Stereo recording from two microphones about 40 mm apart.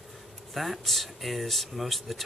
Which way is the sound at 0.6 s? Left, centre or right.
Centre.